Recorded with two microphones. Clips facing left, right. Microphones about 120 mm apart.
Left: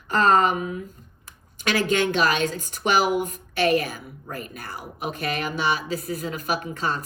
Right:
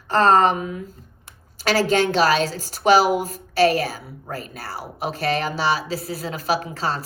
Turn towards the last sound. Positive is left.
turn(degrees=-35)  # may be behind; listen again after turning